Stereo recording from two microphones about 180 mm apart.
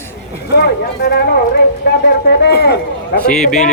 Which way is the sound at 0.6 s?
65° left (ahead or behind).